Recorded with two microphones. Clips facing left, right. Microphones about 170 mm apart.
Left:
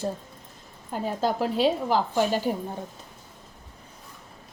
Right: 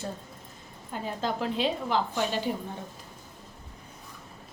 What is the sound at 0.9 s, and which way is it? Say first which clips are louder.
A woman's voice: left 5 dB; 40° left (ahead or behind).